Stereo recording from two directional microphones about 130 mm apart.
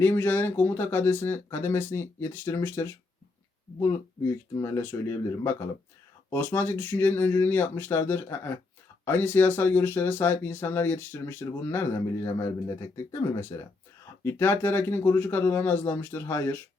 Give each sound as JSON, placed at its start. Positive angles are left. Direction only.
{"t": 0.0, "sound": "speech", "side_deg": 15}